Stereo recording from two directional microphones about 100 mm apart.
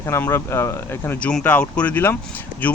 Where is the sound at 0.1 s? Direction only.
25° left (ahead or behind).